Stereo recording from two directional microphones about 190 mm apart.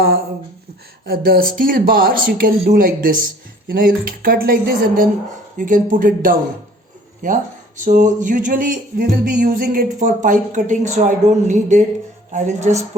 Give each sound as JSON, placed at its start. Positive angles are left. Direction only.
{"t": 1.0, "sound": "music", "side_deg": -50}
{"t": 7.2, "sound": "a woman's voice", "side_deg": -40}
{"t": 7.9, "sound": "music", "side_deg": -40}
{"t": 12.3, "sound": "a woman's voice", "side_deg": -40}